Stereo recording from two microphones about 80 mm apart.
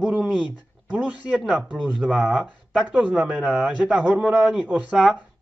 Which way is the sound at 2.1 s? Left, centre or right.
Centre.